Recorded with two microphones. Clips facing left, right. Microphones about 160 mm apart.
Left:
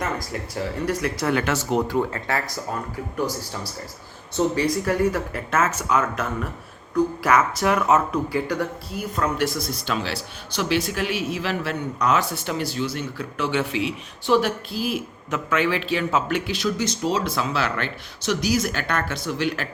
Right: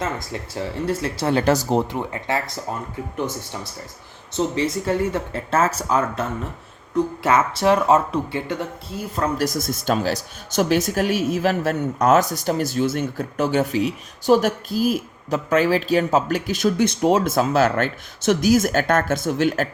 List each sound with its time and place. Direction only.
0.0 s speech: 25° right (ahead or behind)
1.9 s speech: 20° right (ahead or behind); by 19.6 s 45° right (ahead or behind)